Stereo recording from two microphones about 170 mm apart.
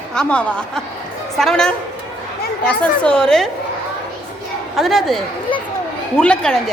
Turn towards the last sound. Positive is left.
turn(degrees=5)  # may be behind; listen again after turning